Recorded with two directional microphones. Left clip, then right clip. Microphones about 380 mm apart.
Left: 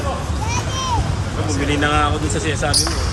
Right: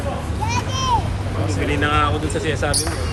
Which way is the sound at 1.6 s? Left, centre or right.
Centre.